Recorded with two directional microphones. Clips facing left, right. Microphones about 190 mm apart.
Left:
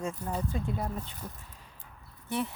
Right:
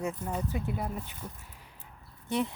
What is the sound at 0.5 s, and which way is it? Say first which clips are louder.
Speech: even; 15° right (ahead or behind).